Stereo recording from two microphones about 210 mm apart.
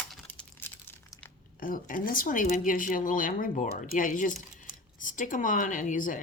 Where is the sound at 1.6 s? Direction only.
40° left (ahead or behind).